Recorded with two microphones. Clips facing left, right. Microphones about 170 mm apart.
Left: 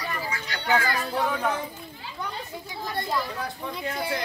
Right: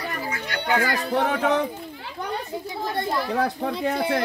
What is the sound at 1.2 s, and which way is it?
A child's voice, 75° right (ahead or behind).